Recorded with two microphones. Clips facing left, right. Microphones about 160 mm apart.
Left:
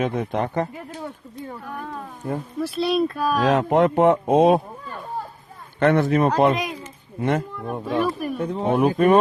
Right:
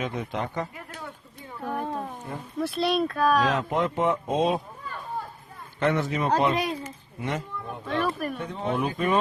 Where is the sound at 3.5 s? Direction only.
60° left (ahead or behind).